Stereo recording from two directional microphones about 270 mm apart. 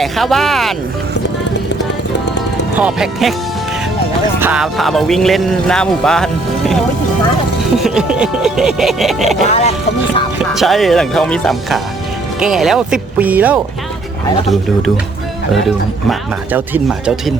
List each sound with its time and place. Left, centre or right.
0.0 s speech: centre
2.7 s speech: centre
4.4 s speech: centre
7.8 s speech: centre
9.5 s speech: left
10.5 s speech: centre
16.0 s speech: centre